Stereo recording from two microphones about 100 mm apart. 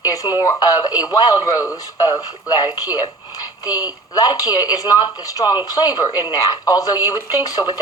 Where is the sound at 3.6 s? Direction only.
40° left (ahead or behind).